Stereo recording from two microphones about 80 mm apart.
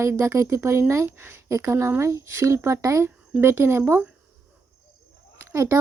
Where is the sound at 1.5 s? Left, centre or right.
Right.